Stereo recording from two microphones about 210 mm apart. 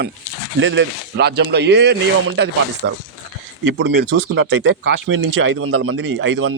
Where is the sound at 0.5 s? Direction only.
60° right (ahead or behind).